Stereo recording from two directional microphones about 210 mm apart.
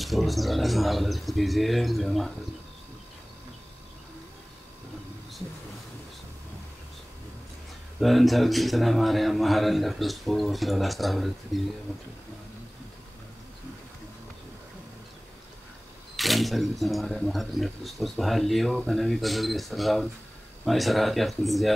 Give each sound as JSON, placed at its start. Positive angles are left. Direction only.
{"t": 0.0, "sound": "speech", "side_deg": 0}
{"t": 8.0, "sound": "speech", "side_deg": 0}
{"t": 16.2, "sound": "speech", "side_deg": 0}